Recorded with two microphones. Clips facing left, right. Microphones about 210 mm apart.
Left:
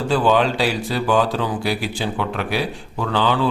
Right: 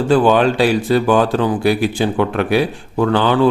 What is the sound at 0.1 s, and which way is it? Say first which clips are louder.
Speech: right 5 dB; 55° right (ahead or behind).